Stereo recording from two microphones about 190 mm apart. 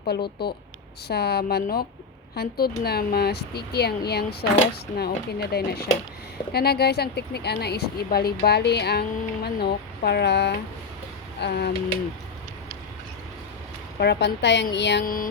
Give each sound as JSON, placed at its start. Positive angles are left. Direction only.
{"t": 0.0, "sound": "a woman's voice", "side_deg": 55}
{"t": 14.0, "sound": "a woman's voice", "side_deg": 60}
{"t": 15.0, "sound": "music", "side_deg": 50}